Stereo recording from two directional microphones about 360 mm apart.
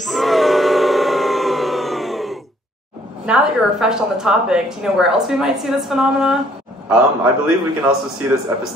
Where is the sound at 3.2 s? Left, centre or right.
Centre.